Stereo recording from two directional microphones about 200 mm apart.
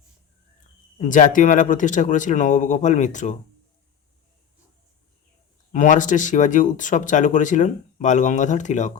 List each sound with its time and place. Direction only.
0.9 s speech: 40° left (ahead or behind)
5.7 s speech: 40° left (ahead or behind)